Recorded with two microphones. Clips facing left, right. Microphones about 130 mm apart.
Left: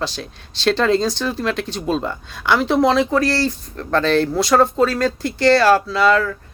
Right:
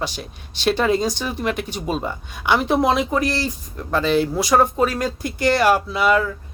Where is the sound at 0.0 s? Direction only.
15° right (ahead or behind).